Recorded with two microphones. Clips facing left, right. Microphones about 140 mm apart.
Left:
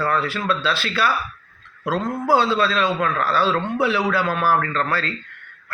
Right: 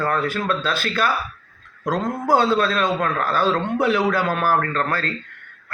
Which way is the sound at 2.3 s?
50° right (ahead or behind).